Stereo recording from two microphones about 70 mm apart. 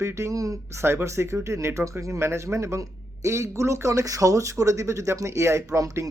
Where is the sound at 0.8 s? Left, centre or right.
Right.